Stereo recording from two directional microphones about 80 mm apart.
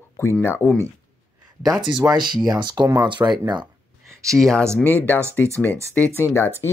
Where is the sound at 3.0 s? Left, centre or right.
Right.